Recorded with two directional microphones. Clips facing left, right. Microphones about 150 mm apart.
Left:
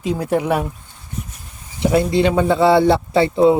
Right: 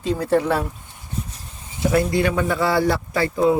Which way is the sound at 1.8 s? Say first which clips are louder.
Left 3 dB; 25° left (ahead or behind).